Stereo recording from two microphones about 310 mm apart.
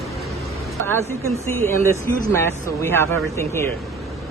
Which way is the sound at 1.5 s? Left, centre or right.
Centre.